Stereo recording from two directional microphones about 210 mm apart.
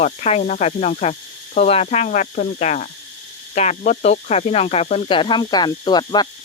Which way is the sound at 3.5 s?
30° left (ahead or behind).